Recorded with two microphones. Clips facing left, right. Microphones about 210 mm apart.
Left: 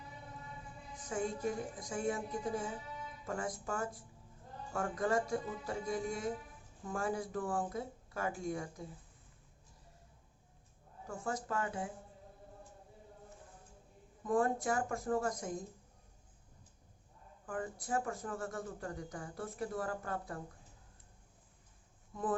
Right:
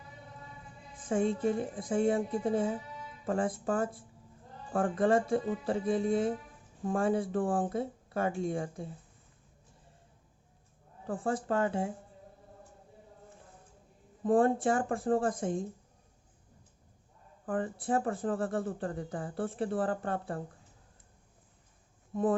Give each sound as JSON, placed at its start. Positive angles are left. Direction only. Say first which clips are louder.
{"t": 1.0, "sound": "speech", "louder": "right 8 dB", "side_deg": -30}
{"t": 11.0, "sound": "speech", "louder": "right 7 dB", "side_deg": -30}
{"t": 14.3, "sound": "speech", "louder": "right 7 dB", "side_deg": -30}
{"t": 17.5, "sound": "speech", "louder": "right 7 dB", "side_deg": -30}